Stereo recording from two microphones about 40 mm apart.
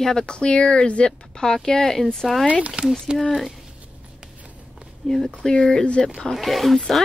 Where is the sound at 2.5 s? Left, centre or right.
Right.